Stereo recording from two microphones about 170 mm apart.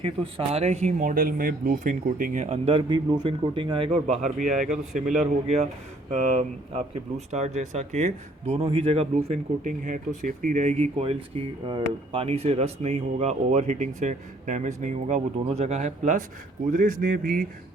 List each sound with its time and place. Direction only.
0.0 s speech: 35° right (ahead or behind)
4.0 s speech: 40° right (ahead or behind)
6.1 s speech: 45° right (ahead or behind)